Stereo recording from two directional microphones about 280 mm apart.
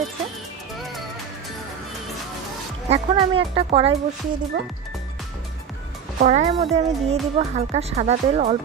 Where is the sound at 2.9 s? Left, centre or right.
Centre.